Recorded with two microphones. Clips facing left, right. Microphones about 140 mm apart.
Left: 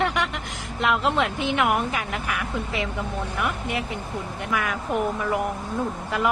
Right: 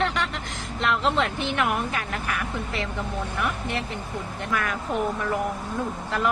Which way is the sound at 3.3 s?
10° left (ahead or behind).